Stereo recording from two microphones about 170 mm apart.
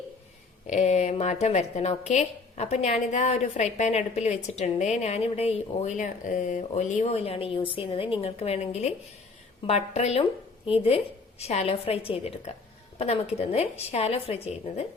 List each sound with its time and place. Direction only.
0.7 s a woman's voice: 40° left (ahead or behind)